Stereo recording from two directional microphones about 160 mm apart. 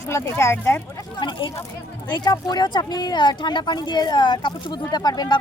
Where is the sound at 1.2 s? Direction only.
30° left (ahead or behind).